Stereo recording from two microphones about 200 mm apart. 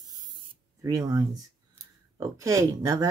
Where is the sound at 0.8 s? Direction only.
15° right (ahead or behind).